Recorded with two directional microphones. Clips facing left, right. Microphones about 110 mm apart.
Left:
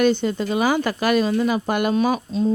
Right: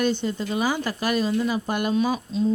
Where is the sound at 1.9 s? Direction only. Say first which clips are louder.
Left 3 dB; 55° left (ahead or behind).